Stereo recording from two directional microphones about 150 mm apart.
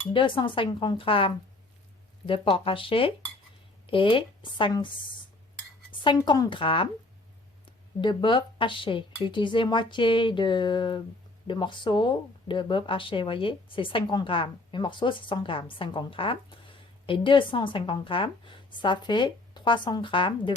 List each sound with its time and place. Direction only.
0.1 s speech: 35° left (ahead or behind)
6.2 s speech: 25° left (ahead or behind)